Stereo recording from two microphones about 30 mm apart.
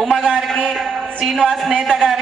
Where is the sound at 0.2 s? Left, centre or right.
Centre.